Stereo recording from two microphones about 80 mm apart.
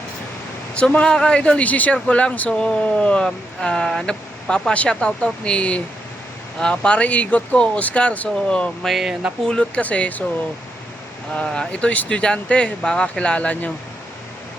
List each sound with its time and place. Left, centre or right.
0.8 s speech: centre
9.5 s speech: centre
11.3 s speech: centre